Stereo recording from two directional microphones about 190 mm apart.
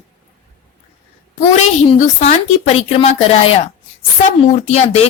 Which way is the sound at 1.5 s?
35° left (ahead or behind).